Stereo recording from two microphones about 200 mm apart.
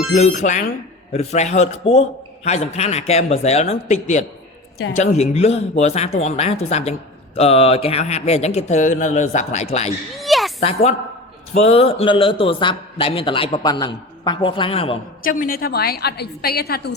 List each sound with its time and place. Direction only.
0.3 s speech: 40° left (ahead or behind)
10.2 s a sound: centre (ahead or behind)
10.6 s a man's voice: 30° left (ahead or behind)
15.2 s a woman's voice: 45° left (ahead or behind)